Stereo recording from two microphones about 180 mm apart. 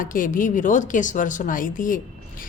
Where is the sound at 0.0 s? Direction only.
50° left (ahead or behind).